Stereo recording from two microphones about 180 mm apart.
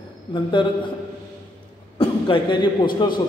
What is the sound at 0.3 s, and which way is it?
Speech, 25° left (ahead or behind).